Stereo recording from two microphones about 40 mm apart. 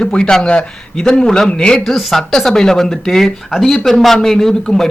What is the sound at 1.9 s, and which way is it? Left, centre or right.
A man's voice, centre.